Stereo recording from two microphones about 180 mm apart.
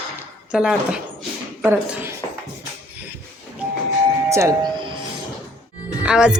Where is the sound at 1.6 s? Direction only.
15° right (ahead or behind).